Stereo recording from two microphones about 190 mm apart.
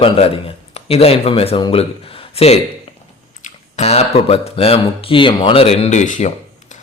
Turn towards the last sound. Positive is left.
turn(degrees=40)  # may be behind; listen again after turning